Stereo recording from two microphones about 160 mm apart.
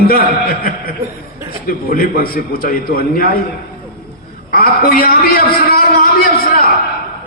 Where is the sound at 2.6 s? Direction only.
65° left (ahead or behind).